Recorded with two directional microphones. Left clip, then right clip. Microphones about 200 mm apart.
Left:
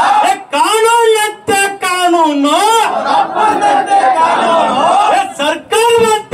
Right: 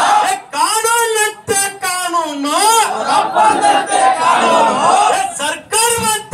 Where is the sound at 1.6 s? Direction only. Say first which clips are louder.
Left 9 dB; 45° left (ahead or behind).